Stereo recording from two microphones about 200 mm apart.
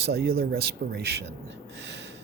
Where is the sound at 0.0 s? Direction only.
50° right (ahead or behind).